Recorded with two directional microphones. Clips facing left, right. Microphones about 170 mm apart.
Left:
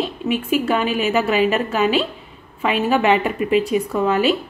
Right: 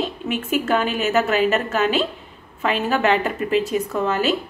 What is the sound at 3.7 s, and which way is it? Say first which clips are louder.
Speech: left 3 dB; 10° left (ahead or behind).